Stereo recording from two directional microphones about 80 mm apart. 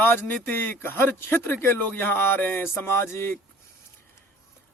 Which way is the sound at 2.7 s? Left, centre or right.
Left.